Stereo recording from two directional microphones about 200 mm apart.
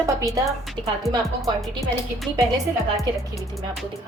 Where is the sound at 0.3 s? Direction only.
Centre (ahead or behind).